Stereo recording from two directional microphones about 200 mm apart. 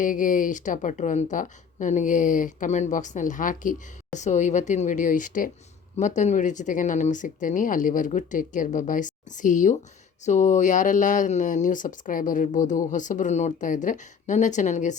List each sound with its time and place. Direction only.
0.0 s speech: 40° left (ahead or behind)